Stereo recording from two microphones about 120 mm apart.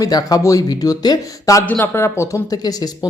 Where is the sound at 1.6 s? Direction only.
15° left (ahead or behind); by 2.9 s 30° left (ahead or behind).